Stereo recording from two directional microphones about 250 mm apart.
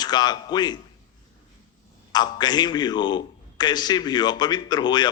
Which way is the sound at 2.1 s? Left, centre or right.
Centre.